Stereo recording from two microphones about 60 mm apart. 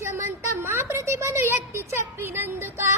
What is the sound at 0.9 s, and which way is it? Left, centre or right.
A woman's voice, right.